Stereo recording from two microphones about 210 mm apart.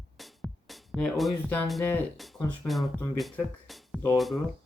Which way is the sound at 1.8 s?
5° left (ahead or behind).